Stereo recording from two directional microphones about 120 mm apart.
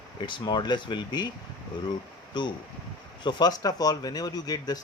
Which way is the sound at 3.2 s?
35° left (ahead or behind).